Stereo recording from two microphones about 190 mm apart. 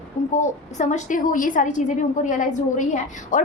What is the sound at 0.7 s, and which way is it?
A woman's voice, 40° left (ahead or behind).